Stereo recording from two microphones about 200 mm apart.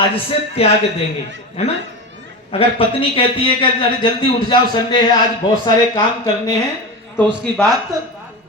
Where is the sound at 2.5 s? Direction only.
30° left (ahead or behind).